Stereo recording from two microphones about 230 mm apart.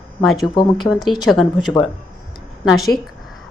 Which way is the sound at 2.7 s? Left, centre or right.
Centre.